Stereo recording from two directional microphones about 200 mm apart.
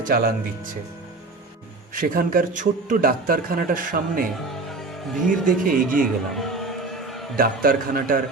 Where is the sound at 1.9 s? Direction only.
45° right (ahead or behind).